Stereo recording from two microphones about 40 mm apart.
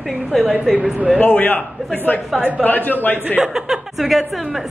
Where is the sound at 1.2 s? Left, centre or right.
Left.